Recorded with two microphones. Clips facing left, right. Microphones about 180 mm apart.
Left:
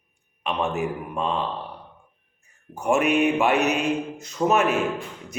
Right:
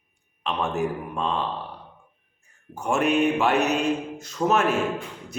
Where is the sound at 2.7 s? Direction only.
10° left (ahead or behind).